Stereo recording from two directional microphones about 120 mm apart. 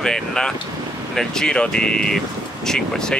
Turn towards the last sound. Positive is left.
turn(degrees=5)  # may be behind; listen again after turning